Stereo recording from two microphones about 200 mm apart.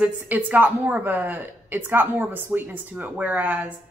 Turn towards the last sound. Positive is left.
turn(degrees=-10)  # may be behind; listen again after turning